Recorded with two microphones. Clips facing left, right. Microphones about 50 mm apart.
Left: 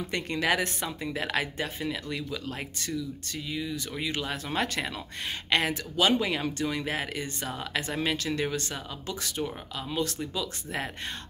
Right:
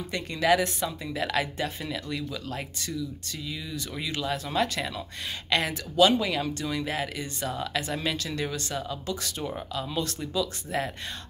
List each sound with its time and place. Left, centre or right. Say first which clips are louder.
0.1 s speech: right 4 dB; left; by 2.6 s centre
4.0 s speech: right 3 dB; left
9.8 s speech: left 2 dB; centre